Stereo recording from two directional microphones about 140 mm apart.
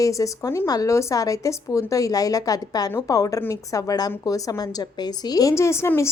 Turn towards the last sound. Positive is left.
turn(degrees=20)  # may be behind; listen again after turning